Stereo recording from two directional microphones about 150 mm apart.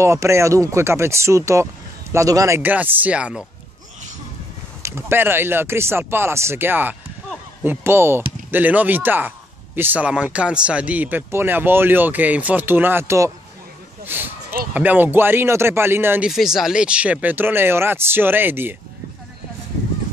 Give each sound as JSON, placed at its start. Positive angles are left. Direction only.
{"t": 0.0, "sound": "speech", "side_deg": -20}
{"t": 4.8, "sound": "speech", "side_deg": -15}
{"t": 14.0, "sound": "a sound", "side_deg": -15}
{"t": 14.7, "sound": "speech", "side_deg": -10}
{"t": 16.3, "sound": "speech", "side_deg": 0}